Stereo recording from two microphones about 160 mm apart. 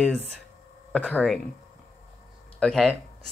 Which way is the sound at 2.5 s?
Centre (ahead or behind).